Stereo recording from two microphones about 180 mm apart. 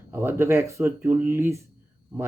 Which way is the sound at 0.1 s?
15° right (ahead or behind).